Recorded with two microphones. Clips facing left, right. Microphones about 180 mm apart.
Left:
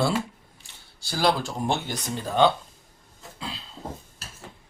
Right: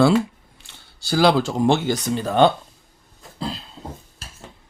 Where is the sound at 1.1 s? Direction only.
90° right; by 2.5 s 65° right (ahead or behind).